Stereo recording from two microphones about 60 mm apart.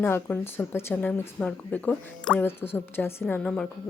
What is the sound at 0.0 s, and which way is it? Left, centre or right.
Speech, left.